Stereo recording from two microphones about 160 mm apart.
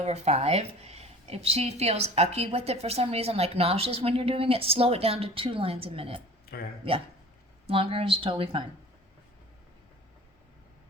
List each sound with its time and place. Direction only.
0.0 s a woman's voice: 40° right (ahead or behind)
7.7 s a woman's voice: 35° right (ahead or behind)